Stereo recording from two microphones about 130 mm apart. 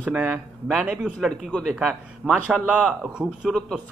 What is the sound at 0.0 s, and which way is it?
A man's voice, 10° right (ahead or behind).